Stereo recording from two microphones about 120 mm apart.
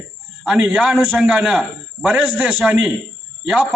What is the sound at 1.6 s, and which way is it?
A man's voice, 5° left (ahead or behind).